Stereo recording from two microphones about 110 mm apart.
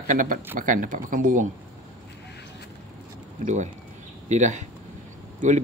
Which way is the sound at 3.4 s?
90° right.